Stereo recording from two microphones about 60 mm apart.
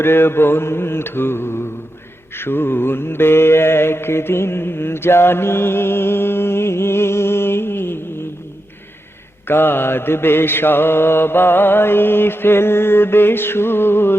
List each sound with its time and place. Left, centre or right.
0.0 s mantra: left
9.5 s mantra: left